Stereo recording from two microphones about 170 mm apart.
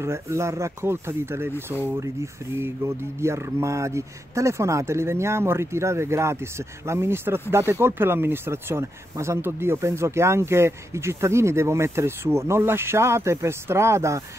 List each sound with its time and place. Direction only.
0.0 s speech: 15° right (ahead or behind)